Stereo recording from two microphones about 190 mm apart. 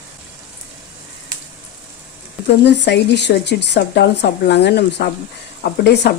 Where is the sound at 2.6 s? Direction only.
65° left (ahead or behind).